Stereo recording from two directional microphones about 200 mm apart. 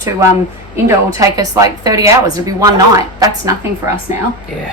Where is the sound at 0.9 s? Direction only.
15° right (ahead or behind).